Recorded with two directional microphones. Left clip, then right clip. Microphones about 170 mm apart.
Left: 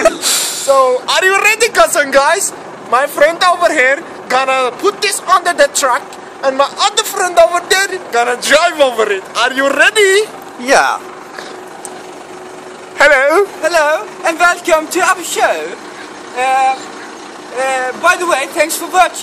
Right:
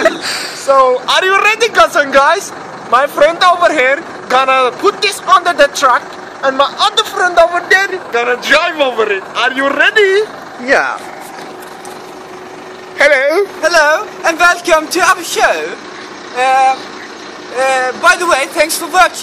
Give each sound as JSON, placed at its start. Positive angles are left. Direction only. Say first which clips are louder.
{"t": 0.0, "sound": "speech", "louder": "left 1 dB", "side_deg": 15}
{"t": 2.9, "sound": "speech", "louder": "right 1 dB", "side_deg": 10}
{"t": 7.5, "sound": "speech", "louder": "right 2 dB", "side_deg": 60}
{"t": 10.6, "sound": "speech", "louder": "left 2 dB", "side_deg": 20}
{"t": 12.9, "sound": "speech", "louder": "left 1 dB", "side_deg": 20}
{"t": 13.6, "sound": "speech", "louder": "right 2 dB", "side_deg": 5}